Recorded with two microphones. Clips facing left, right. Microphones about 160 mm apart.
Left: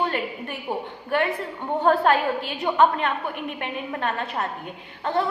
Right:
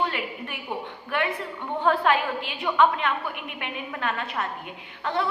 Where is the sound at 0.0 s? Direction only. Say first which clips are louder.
Left 3 dB; 40° left (ahead or behind).